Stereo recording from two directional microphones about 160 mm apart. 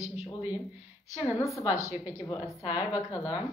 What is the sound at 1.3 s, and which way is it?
Speech, 20° left (ahead or behind).